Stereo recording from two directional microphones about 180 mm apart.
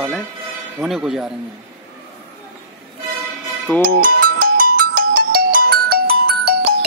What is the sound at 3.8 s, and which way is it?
Ringtone, 50° right (ahead or behind).